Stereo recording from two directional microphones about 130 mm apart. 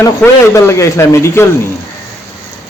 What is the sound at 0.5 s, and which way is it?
Speech, 25° left (ahead or behind).